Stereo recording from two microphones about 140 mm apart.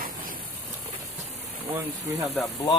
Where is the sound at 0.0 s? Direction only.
80° right.